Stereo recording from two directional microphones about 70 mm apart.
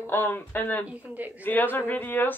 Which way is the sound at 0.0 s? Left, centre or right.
Left.